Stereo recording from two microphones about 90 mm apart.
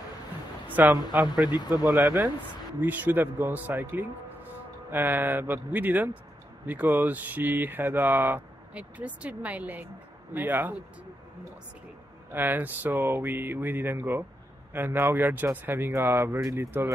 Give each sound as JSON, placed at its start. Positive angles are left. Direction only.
{"t": 0.7, "sound": "speech", "side_deg": -20}
{"t": 2.8, "sound": "speech", "side_deg": -20}
{"t": 12.3, "sound": "speech", "side_deg": -20}